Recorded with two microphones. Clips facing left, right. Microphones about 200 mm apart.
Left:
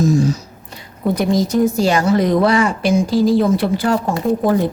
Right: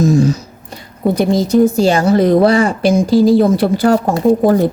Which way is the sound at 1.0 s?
30° right (ahead or behind).